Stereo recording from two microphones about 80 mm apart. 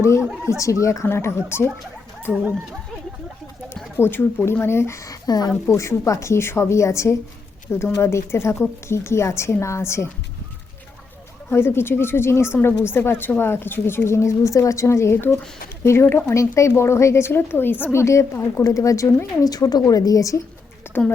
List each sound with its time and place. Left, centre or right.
0.6 s a woman's voice: left
3.9 s a woman's voice: left
5.0 s a sound: left
5.6 s a woman's voice: left
7.7 s a woman's voice: left
11.5 s a woman's voice: left
17.9 s a woman's voice: left
20.9 s a sound: left